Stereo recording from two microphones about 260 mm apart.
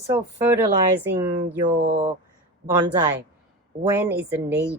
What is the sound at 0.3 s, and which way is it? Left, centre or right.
Speech, centre.